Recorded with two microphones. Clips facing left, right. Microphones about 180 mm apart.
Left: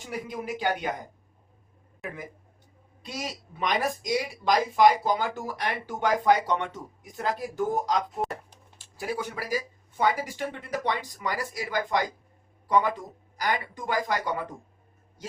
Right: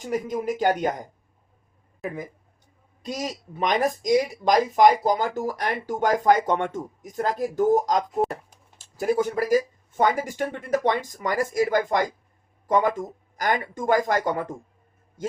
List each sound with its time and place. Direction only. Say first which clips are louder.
0.0 s speech: right 8 dB; 45° right (ahead or behind)
3.0 s speech: right 5 dB; 45° right (ahead or behind)
8.2 s a sound: right 6 dB; centre (ahead or behind)
8.8 s speech: right 9 dB; 45° right (ahead or behind)